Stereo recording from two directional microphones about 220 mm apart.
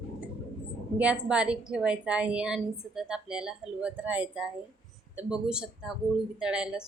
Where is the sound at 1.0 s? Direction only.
5° right (ahead or behind).